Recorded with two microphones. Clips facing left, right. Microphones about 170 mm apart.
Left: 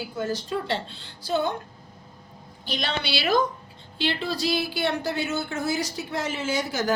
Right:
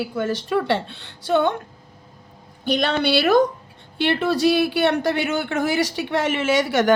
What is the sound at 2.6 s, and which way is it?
A woman's voice, 55° right (ahead or behind).